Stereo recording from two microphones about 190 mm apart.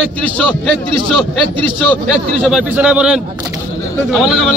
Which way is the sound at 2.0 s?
5° right (ahead or behind).